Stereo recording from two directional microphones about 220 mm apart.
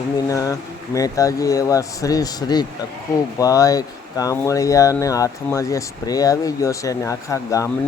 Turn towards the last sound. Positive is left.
turn(degrees=15)  # may be behind; listen again after turning